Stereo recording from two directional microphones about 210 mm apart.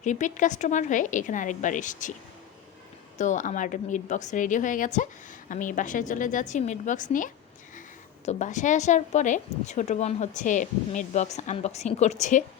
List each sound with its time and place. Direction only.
0.0 s speech: 35° left (ahead or behind)
3.2 s speech: 35° left (ahead or behind)